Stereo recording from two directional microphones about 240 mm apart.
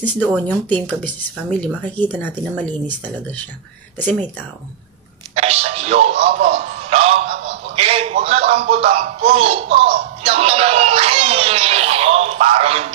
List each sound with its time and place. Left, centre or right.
0.5 s a woman's voice: centre
5.3 s music: right
7.4 s speech: right
10.2 s a sound: right